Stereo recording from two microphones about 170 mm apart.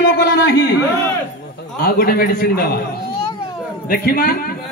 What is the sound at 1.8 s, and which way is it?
Speech, 60° left (ahead or behind).